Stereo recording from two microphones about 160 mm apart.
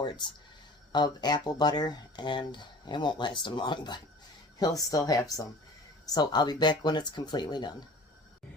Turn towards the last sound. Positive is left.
turn(degrees=25)  # may be behind; listen again after turning